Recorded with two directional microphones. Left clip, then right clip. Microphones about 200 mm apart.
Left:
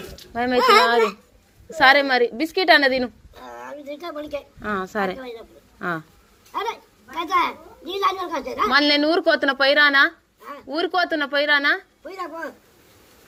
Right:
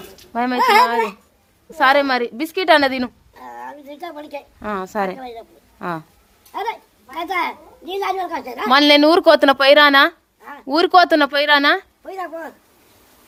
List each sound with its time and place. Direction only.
0.3 s a woman's voice: 15° right (ahead or behind)
10.7 s speech: 40° right (ahead or behind); by 12.3 s 20° right (ahead or behind)